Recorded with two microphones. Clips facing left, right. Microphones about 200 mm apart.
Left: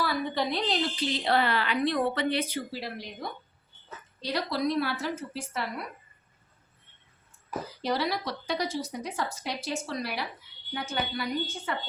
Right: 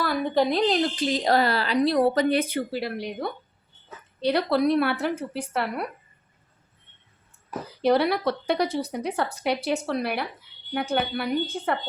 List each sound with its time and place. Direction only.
0.0 s a woman's voice: 45° right (ahead or behind); by 5.9 s 65° right (ahead or behind)
7.8 s speech: 60° right (ahead or behind)